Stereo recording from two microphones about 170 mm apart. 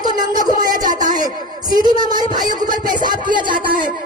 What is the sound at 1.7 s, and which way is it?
Child singing, 25° right (ahead or behind).